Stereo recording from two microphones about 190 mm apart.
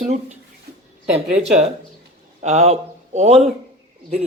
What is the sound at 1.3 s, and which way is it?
Speech, 35° right (ahead or behind).